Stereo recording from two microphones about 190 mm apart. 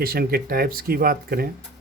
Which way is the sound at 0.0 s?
50° right (ahead or behind).